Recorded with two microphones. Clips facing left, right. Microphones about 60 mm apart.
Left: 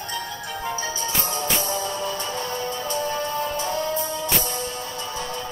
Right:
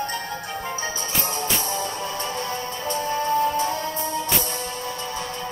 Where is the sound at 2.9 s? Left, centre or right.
Right.